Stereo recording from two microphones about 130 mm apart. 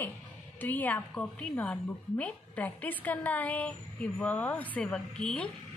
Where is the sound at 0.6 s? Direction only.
15° left (ahead or behind).